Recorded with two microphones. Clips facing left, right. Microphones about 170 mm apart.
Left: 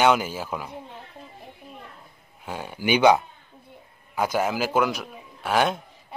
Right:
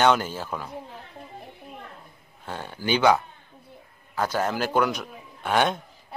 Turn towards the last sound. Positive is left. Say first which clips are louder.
# even
turn(degrees=5)  # may be behind; listen again after turning